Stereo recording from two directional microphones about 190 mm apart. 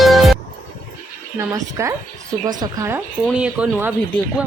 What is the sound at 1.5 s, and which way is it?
A woman's voice, 15° right (ahead or behind).